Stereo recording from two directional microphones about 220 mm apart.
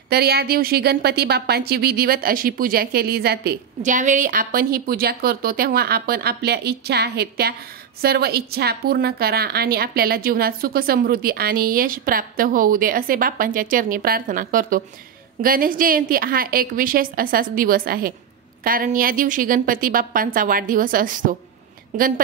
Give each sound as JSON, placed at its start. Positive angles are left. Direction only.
{"t": 0.1, "sound": "a woman's voice", "side_deg": -45}